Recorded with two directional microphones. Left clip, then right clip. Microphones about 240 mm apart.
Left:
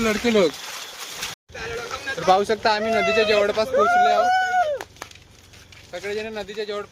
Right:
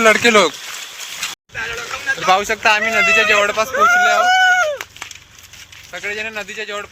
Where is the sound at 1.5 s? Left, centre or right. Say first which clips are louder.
Right 6 dB; centre.